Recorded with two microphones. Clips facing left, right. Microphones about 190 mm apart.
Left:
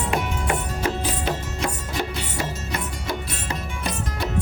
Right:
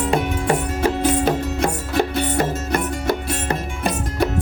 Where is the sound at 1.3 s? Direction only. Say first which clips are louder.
Right 7 dB; 50° right (ahead or behind).